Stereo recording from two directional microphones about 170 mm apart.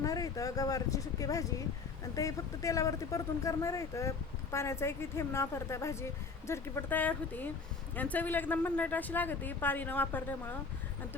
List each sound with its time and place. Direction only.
0.0 s speech: 20° left (ahead or behind)